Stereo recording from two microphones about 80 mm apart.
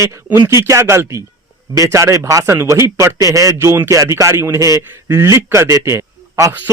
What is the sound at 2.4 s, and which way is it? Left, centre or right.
Speech, right.